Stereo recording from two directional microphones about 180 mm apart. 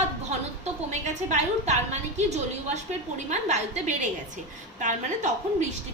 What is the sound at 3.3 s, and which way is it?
A woman's voice, 40° right (ahead or behind).